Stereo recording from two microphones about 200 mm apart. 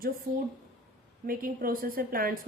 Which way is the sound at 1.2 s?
45° right (ahead or behind).